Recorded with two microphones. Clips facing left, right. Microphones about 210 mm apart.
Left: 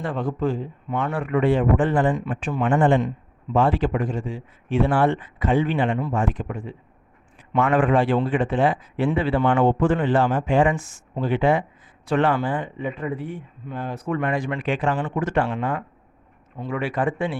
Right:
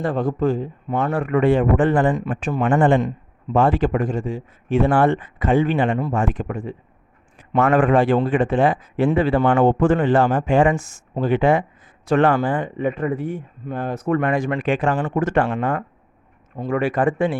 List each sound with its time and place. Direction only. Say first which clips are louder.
0.0 s a man's voice: right 4 dB; 40° right (ahead or behind)
1.3 s speech: right 2 dB; 50° right (ahead or behind)